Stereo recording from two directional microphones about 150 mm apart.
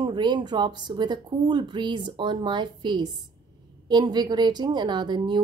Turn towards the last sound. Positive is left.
turn(degrees=-30)  # may be behind; listen again after turning